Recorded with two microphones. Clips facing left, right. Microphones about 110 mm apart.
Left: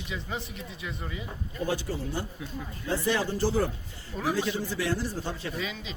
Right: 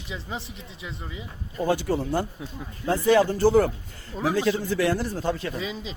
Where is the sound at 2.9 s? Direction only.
55° right (ahead or behind).